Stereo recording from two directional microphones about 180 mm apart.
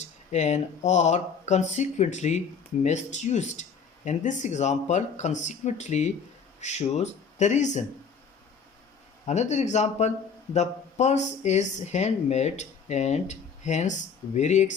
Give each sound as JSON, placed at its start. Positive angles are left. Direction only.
{"t": 0.3, "sound": "speech", "side_deg": 40}
{"t": 9.2, "sound": "speech", "side_deg": 40}